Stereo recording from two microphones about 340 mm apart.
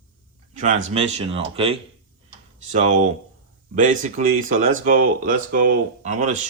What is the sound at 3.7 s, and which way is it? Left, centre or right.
Speech, right.